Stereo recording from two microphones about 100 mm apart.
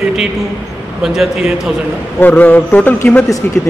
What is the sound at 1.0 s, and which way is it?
Speech, 5° right (ahead or behind).